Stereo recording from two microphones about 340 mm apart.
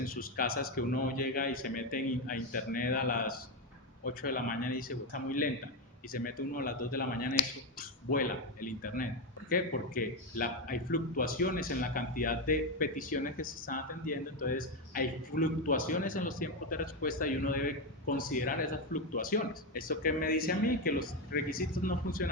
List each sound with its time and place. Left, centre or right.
0.0 s speech: left